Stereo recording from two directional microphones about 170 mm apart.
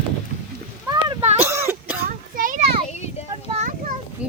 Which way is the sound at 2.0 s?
55° right (ahead or behind).